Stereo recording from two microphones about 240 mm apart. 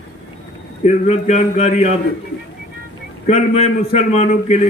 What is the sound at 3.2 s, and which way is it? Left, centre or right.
A man's voice, left.